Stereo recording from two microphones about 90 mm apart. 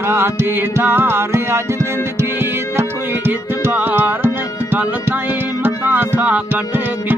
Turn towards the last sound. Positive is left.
turn(degrees=-20)  # may be behind; listen again after turning